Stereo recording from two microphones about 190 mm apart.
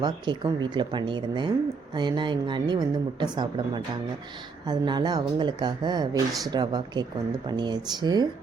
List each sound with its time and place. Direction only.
0.0 s a woman's voice: 25° right (ahead or behind)